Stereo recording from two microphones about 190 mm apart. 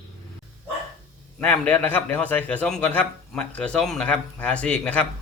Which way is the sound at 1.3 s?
5° left (ahead or behind).